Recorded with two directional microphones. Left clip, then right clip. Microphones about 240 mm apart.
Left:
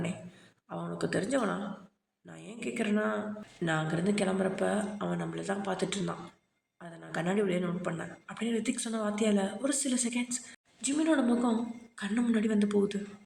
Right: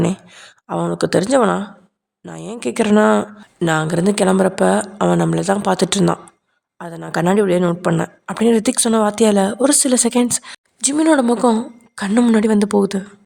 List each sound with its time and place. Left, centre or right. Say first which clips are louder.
0.7 s a woman's voice: right 16 dB; right